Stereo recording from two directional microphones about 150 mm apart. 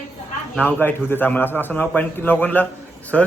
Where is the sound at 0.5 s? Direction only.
10° left (ahead or behind).